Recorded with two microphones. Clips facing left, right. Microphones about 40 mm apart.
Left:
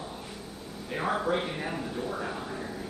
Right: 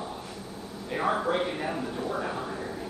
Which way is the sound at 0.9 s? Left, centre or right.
Centre.